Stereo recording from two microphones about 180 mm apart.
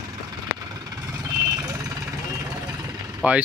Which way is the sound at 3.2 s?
10° right (ahead or behind).